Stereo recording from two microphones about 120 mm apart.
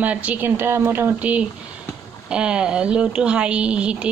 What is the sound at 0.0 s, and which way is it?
Speech, 10° right (ahead or behind).